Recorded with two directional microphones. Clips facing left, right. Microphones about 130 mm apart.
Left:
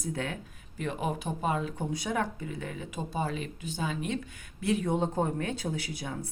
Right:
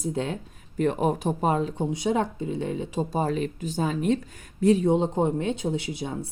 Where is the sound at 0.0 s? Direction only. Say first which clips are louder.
Right 6 dB; 25° right (ahead or behind).